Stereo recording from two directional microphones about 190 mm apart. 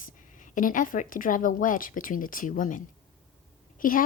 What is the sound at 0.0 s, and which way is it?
A woman's voice, 45° left (ahead or behind).